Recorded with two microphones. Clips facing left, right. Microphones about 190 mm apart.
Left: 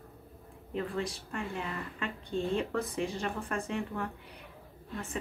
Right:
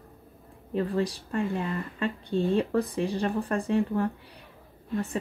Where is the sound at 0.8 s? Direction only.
35° right (ahead or behind).